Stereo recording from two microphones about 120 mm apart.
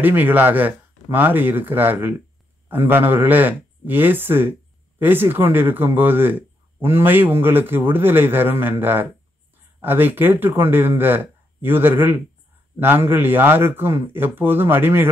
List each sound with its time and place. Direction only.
0.0 s speech: 15° right (ahead or behind)